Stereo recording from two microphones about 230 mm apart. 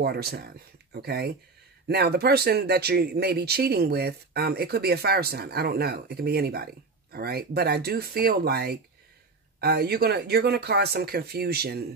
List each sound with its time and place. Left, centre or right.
0.0 s speech: right